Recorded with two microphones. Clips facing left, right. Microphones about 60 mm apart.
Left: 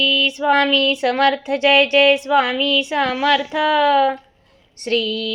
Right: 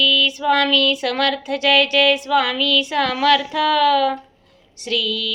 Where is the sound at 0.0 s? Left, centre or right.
Left.